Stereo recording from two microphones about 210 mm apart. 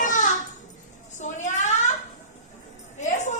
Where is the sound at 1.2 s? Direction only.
35° left (ahead or behind).